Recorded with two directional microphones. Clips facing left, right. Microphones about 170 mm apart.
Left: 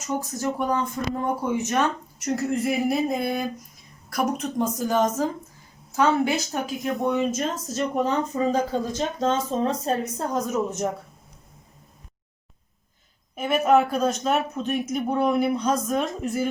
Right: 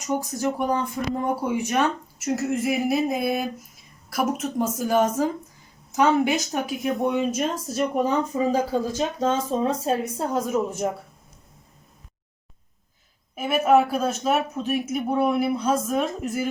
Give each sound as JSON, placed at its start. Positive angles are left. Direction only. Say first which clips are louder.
{"t": 0.2, "sound": "speech", "louder": "right 1 dB", "side_deg": -15}
{"t": 13.3, "sound": "speech", "louder": "right 1 dB", "side_deg": -5}